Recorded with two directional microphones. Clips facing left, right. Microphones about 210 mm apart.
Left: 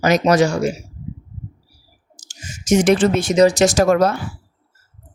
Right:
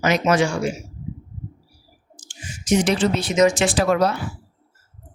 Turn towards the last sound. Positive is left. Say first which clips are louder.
# left 4 dB
turn(degrees=50)  # may be behind; listen again after turning